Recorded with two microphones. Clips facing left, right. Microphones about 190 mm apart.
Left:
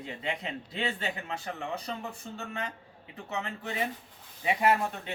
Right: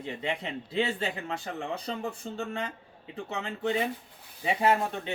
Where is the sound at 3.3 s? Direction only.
30° right (ahead or behind).